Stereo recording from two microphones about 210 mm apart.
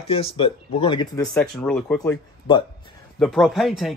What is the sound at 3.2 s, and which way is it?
Speech, centre (ahead or behind).